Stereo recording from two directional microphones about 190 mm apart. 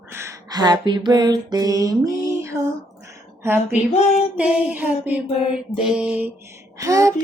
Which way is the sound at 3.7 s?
35° left (ahead or behind).